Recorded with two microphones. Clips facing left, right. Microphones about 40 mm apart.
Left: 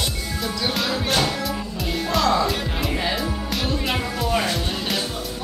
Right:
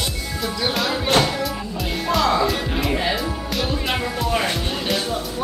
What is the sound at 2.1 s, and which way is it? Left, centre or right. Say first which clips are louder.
Music: right 2 dB; centre.